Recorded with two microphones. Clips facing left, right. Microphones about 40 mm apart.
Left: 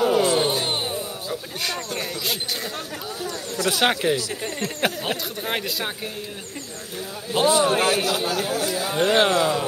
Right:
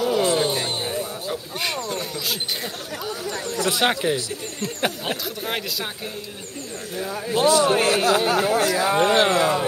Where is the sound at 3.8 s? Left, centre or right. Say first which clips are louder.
Left 1 dB; centre.